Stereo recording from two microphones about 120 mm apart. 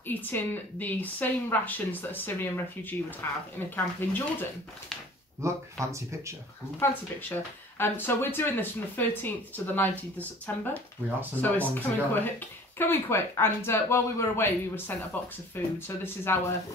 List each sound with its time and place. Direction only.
0.0 s speech: 15° left (ahead or behind)
5.4 s speech: 25° right (ahead or behind)
6.8 s speech: 15° left (ahead or behind)